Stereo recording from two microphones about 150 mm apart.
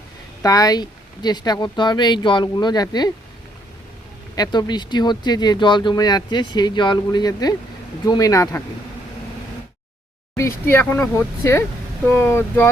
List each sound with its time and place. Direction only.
0.4 s speech: 25° left (ahead or behind)
4.4 s speech: 25° left (ahead or behind)
10.7 s speech: 15° left (ahead or behind)